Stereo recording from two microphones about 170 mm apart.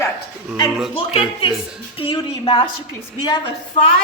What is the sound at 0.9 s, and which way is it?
Speech, 35° left (ahead or behind).